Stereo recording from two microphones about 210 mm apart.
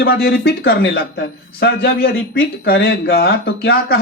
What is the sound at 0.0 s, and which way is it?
Speech, 45° left (ahead or behind).